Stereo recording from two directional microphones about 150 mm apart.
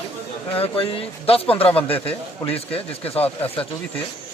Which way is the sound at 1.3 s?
40° left (ahead or behind).